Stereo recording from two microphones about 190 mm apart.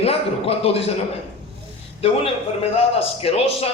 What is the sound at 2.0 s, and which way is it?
A man's voice, 30° left (ahead or behind).